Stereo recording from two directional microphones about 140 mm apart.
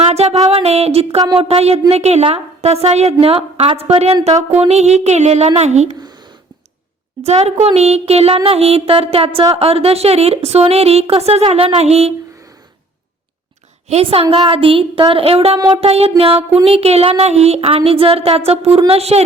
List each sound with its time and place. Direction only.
0.1 s a sound: 50° right (ahead or behind)
1.4 s speech: 45° right (ahead or behind)
7.2 s speech: 50° right (ahead or behind)
13.8 s a woman's voice: 45° right (ahead or behind)
15.5 s a sound: 30° right (ahead or behind)
15.8 s speech: 45° right (ahead or behind)